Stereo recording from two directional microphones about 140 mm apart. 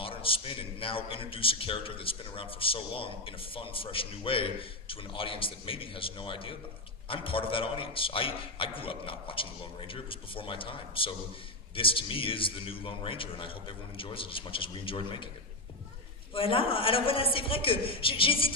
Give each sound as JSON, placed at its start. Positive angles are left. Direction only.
{"t": 0.0, "sound": "a man's voice", "side_deg": 40}
{"t": 16.3, "sound": "a man's voice", "side_deg": 40}